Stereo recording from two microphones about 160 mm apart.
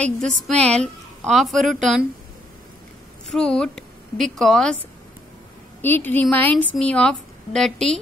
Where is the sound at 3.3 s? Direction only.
5° left (ahead or behind).